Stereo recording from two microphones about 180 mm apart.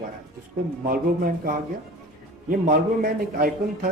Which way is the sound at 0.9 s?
50° right (ahead or behind).